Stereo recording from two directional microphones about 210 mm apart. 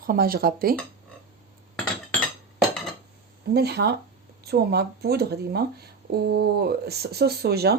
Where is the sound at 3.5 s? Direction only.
50° right (ahead or behind).